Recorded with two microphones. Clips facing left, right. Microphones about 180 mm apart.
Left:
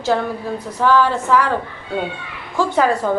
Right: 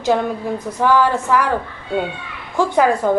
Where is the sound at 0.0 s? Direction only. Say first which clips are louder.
Right 2 dB; 15° right (ahead or behind).